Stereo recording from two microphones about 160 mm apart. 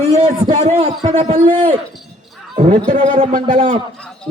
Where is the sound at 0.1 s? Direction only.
40° right (ahead or behind).